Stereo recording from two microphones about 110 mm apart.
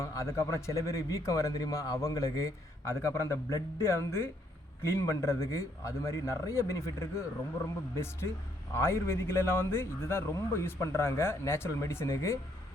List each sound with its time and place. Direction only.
0.0 s a man's voice: 30° left (ahead or behind)